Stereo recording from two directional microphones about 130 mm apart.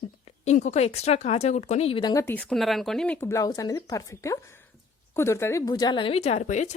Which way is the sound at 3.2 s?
25° left (ahead or behind).